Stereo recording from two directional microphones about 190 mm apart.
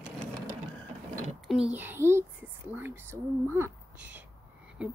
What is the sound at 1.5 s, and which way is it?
Speech, 5° right (ahead or behind).